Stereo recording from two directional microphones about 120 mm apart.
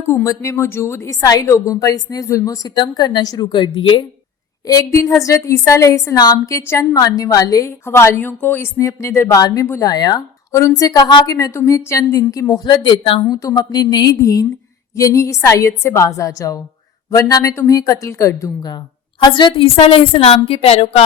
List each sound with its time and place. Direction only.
0.0 s a woman's voice: 20° left (ahead or behind); by 4.0 s 45° left (ahead or behind)
4.6 s a woman's voice: 25° left (ahead or behind)
9.9 s a woman's voice: 35° left (ahead or behind)
13.3 s a woman's voice: 30° left (ahead or behind); by 21.0 s 55° left (ahead or behind)